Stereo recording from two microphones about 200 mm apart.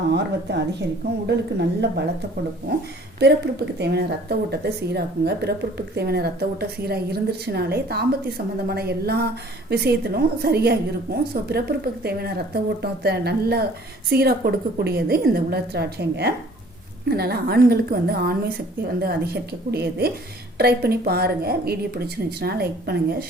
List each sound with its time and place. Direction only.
0.1 s a woman's voice: 60° right (ahead or behind)
3.2 s speech: 55° right (ahead or behind)